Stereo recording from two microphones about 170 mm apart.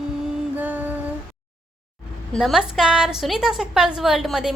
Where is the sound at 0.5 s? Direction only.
10° right (ahead or behind).